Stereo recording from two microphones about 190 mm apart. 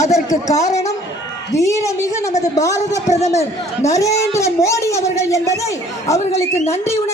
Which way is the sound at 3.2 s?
35° left (ahead or behind).